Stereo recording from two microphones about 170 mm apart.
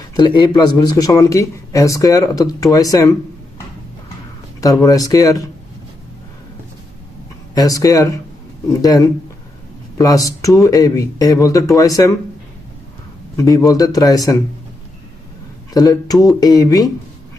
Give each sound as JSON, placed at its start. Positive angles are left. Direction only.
{"t": 0.2, "sound": "speech", "side_deg": 25}
{"t": 4.6, "sound": "speech", "side_deg": 20}
{"t": 7.5, "sound": "speech", "side_deg": 20}
{"t": 13.3, "sound": "speech", "side_deg": 20}
{"t": 15.7, "sound": "speech", "side_deg": 20}